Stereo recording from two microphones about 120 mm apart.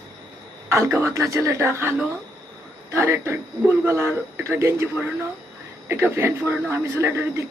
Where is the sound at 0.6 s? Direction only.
20° right (ahead or behind).